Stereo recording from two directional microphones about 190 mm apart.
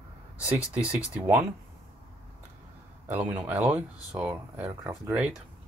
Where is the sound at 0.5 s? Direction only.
5° right (ahead or behind).